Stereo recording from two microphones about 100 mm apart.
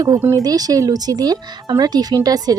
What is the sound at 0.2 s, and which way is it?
Speech, 25° right (ahead or behind).